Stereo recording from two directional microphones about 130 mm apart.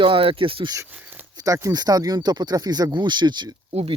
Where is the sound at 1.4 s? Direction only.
25° right (ahead or behind).